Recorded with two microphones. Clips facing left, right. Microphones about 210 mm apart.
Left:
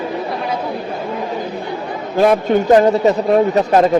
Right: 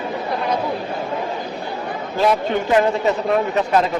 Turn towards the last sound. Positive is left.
turn(degrees=40)  # may be behind; listen again after turning